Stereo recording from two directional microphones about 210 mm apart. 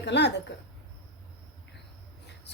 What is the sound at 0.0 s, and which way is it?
Speech, 55° left (ahead or behind).